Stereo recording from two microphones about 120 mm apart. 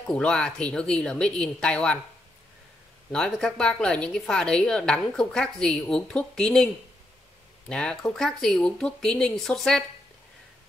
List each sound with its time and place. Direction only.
0.1 s a woman's voice: 5° left (ahead or behind)
3.1 s a woman's voice: 5° left (ahead or behind)